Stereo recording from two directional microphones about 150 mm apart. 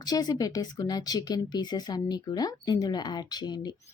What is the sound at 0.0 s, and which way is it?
Speech, 25° left (ahead or behind).